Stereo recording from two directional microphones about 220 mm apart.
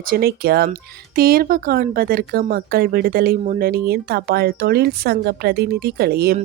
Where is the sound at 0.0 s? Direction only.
45° right (ahead or behind).